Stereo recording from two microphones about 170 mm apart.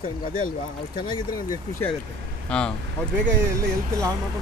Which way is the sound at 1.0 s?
25° left (ahead or behind).